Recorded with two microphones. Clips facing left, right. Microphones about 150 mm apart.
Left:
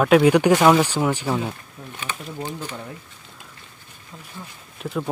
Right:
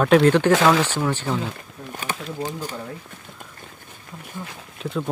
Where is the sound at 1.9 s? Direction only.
40° right (ahead or behind).